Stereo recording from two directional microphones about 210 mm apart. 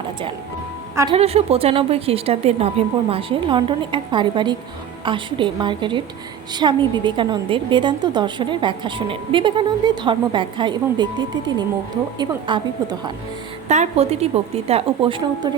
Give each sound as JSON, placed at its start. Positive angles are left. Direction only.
{"t": 1.1, "sound": "a woman's voice", "side_deg": -30}
{"t": 13.7, "sound": "a woman's voice", "side_deg": -30}